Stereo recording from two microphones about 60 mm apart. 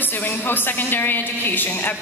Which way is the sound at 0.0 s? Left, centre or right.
Left.